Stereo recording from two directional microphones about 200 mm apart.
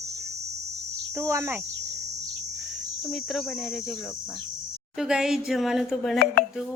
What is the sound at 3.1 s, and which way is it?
Speech, centre (ahead or behind).